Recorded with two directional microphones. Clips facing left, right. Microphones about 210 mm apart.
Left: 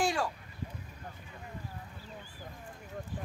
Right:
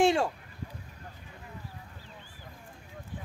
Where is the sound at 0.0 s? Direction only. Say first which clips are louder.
Right 7 dB; 25° right (ahead or behind).